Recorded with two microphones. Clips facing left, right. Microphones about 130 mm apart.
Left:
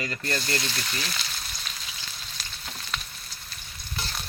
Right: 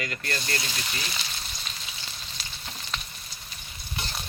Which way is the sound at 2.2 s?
Centre (ahead or behind).